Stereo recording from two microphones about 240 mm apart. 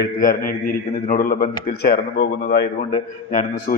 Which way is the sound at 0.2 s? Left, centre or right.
Left.